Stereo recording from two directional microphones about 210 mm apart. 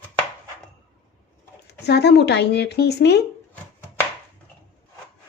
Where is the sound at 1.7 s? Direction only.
50° left (ahead or behind).